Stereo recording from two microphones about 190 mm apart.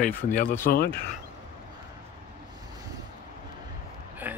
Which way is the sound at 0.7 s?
50° left (ahead or behind).